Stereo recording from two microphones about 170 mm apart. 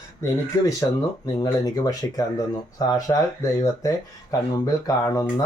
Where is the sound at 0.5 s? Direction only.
20° left (ahead or behind).